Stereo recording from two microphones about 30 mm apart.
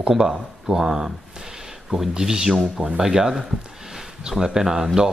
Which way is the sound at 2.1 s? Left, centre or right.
Centre.